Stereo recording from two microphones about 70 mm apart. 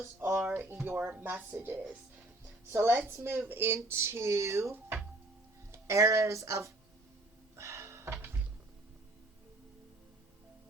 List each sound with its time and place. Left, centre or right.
0.0 s speech: right
2.6 s speech: right
4.7 s speech: right
5.7 s speech: right
7.5 s a sound: right